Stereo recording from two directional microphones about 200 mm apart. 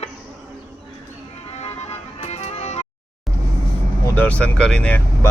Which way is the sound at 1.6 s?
30° left (ahead or behind).